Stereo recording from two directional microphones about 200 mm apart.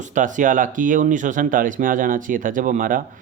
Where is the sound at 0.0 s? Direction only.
40° right (ahead or behind).